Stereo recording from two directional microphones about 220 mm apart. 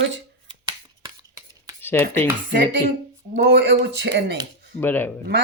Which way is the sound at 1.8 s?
10° left (ahead or behind).